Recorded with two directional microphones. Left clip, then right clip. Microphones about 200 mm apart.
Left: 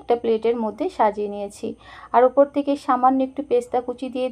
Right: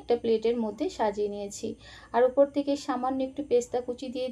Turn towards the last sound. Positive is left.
turn(degrees=20)  # may be behind; listen again after turning